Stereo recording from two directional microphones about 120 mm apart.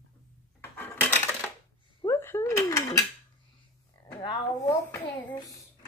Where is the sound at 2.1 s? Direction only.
20° left (ahead or behind).